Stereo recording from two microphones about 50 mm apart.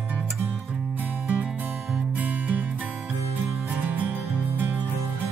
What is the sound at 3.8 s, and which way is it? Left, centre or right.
Music, right.